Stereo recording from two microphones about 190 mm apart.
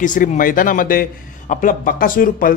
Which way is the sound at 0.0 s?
40° left (ahead or behind).